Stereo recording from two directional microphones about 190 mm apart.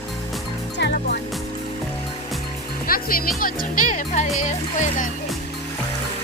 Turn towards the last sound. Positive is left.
turn(degrees=40)  # may be behind; listen again after turning